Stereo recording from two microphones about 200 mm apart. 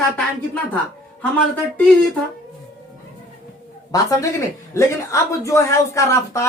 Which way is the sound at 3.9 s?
15° left (ahead or behind).